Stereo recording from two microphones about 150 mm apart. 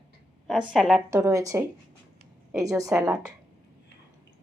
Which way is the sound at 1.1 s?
20° right (ahead or behind).